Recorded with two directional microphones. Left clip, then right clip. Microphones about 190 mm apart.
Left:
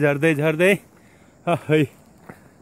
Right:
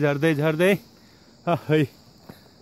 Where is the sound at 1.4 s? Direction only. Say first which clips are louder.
Left 2 dB; 5° right (ahead or behind).